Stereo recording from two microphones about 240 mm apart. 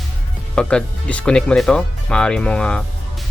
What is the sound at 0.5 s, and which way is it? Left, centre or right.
Speech, centre.